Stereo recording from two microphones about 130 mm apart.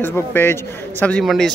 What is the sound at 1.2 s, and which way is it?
Speech, centre (ahead or behind).